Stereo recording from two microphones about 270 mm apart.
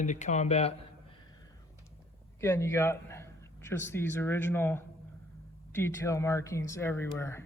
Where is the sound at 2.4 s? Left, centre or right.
Centre.